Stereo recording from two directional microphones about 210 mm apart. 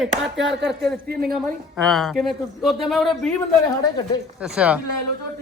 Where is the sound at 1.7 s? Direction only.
Centre (ahead or behind).